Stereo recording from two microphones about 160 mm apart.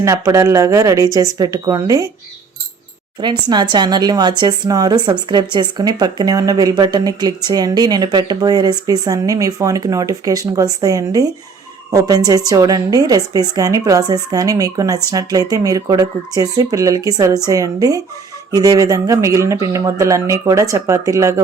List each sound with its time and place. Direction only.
0.0 s a woman's voice: 20° right (ahead or behind)
3.5 s a woman's voice: 25° right (ahead or behind)